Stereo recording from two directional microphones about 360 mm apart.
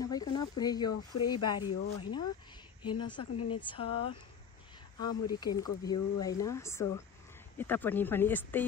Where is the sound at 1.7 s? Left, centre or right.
Left.